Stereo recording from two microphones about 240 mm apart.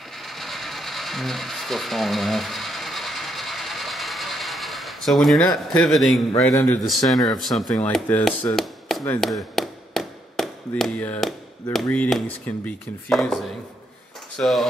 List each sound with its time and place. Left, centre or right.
0.3 s a sound: centre
6.3 s speech: centre
7.2 s chopping: centre
11.7 s speech: centre